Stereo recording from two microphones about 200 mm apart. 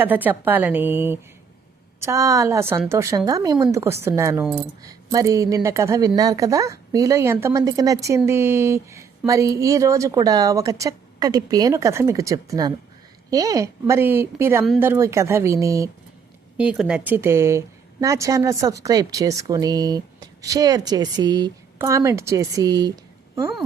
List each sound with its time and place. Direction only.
0.0 s a woman's voice: 10° right (ahead or behind)